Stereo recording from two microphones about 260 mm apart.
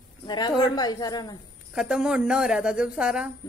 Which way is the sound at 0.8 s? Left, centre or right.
Centre.